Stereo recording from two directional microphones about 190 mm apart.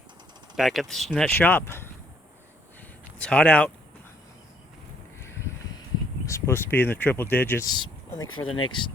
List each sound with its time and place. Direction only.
0.5 s speech: centre (ahead or behind)
3.2 s speech: 5° left (ahead or behind)
5.2 s a sound: 15° left (ahead or behind)
6.2 s speech: 15° left (ahead or behind)
7.7 s speech: 25° left (ahead or behind)
8.3 s speech: 90° left